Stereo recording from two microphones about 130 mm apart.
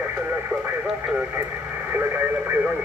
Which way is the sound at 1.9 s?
15° right (ahead or behind).